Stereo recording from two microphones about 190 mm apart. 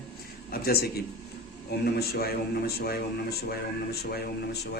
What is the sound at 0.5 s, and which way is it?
Speech, 55° left (ahead or behind).